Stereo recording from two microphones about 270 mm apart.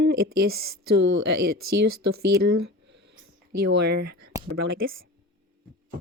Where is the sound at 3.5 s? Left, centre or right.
Right.